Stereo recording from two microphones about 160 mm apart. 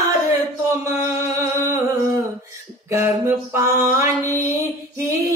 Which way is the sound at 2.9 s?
15° right (ahead or behind).